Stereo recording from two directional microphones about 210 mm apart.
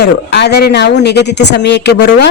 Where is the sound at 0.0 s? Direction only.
50° left (ahead or behind).